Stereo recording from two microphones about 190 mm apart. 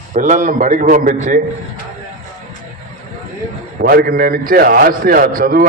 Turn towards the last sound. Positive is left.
turn(degrees=-45)  # may be behind; listen again after turning